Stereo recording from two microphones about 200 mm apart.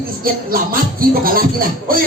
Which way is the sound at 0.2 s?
45° right (ahead or behind).